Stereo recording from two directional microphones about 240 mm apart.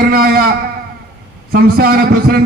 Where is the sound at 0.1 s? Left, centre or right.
Right.